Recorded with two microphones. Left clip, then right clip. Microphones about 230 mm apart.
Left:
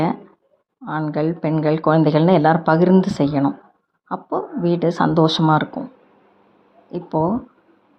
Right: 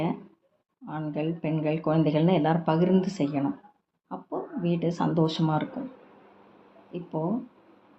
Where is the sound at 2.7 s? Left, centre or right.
Centre.